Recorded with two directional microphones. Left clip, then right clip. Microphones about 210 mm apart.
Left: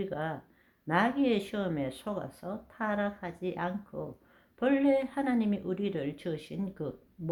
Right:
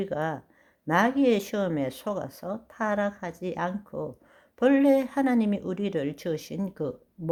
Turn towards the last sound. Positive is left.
turn(degrees=-40)  # may be behind; listen again after turning